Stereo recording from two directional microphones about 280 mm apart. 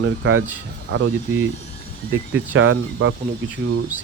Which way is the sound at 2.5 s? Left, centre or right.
Right.